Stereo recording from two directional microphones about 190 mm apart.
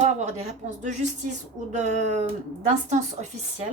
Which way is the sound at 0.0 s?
40° right (ahead or behind).